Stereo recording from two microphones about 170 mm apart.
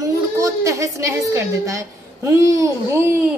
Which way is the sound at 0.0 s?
20° right (ahead or behind).